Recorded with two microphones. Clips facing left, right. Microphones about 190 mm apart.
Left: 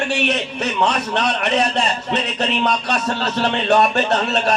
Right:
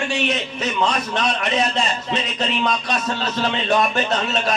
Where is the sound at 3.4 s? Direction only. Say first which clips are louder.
Left 4 dB; 65° left (ahead or behind).